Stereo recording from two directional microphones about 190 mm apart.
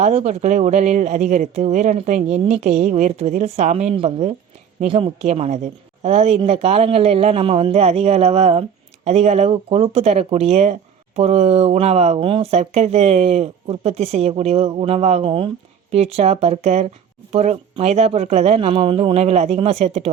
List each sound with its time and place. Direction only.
0.0 s speech: 35° right (ahead or behind)